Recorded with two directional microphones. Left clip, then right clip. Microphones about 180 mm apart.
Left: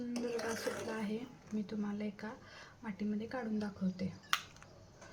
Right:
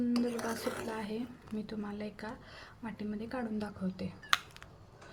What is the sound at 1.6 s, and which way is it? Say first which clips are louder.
Speech: right 1 dB; 20° right (ahead or behind).